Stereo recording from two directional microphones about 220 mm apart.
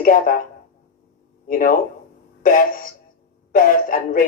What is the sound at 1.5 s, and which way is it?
Speech, 40° left (ahead or behind).